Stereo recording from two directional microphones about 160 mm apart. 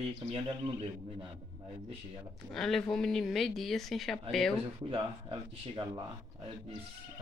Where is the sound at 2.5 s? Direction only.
Centre (ahead or behind).